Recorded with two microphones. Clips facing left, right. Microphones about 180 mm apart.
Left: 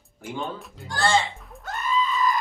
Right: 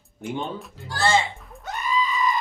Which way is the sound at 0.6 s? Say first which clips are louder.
Even; 5° right (ahead or behind).